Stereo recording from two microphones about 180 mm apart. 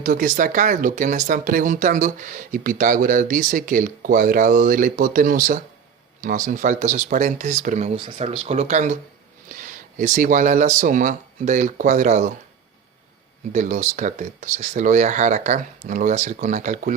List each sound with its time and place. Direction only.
0.0 s speech: 45° right (ahead or behind)
13.5 s speech: 45° right (ahead or behind)